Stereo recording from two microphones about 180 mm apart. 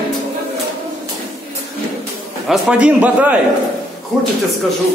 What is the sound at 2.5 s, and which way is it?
Speech, 5° right (ahead or behind).